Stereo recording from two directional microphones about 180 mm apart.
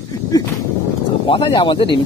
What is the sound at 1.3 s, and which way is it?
Speech, 25° left (ahead or behind).